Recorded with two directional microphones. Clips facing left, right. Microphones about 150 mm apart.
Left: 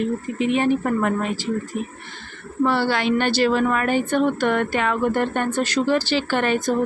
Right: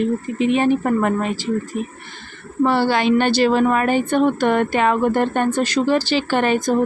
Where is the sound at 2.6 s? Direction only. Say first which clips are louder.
Right 4 dB; 15° right (ahead or behind).